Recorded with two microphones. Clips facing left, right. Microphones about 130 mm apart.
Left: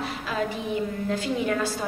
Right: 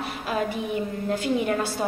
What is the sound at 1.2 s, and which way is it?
Speech, 60° right (ahead or behind).